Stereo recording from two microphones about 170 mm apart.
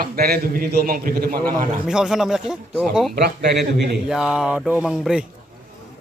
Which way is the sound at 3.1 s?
75° right (ahead or behind).